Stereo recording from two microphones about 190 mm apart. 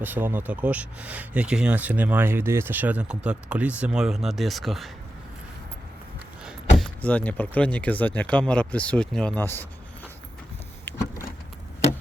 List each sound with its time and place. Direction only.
0.0 s speech: 10° right (ahead or behind)
6.7 s speech: 5° left (ahead or behind)
11.1 s vehicle: 50° left (ahead or behind)